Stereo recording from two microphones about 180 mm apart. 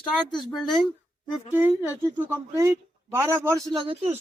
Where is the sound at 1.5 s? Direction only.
10° right (ahead or behind).